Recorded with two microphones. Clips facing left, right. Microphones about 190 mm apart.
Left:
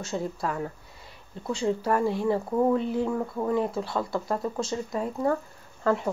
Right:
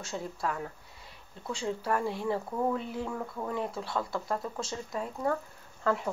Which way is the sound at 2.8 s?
30° left (ahead or behind).